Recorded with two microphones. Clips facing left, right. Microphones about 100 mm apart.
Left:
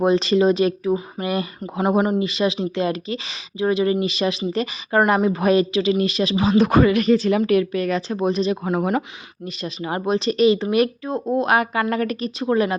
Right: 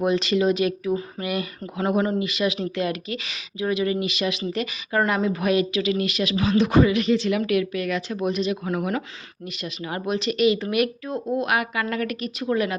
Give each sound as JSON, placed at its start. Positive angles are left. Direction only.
{"t": 0.0, "sound": "speech", "side_deg": 35}
{"t": 6.6, "sound": "speech", "side_deg": 50}